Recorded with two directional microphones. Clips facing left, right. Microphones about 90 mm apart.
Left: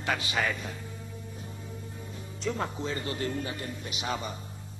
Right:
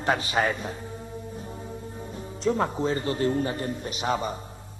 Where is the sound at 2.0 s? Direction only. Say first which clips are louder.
Right 7 dB; 35° right (ahead or behind).